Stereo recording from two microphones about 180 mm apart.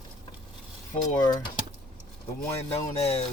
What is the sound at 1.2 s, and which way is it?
Speech, 20° left (ahead or behind).